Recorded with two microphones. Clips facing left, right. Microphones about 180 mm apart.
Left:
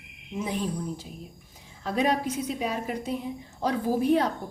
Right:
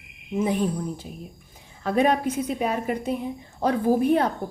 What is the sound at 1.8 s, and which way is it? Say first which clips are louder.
A woman's voice: right 4 dB; 55° right (ahead or behind).